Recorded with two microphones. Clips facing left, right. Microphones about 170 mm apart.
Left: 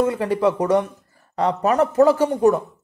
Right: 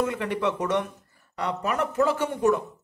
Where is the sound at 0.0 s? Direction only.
30° left (ahead or behind).